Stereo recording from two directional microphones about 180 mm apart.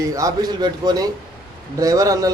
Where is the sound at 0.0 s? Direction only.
20° right (ahead or behind).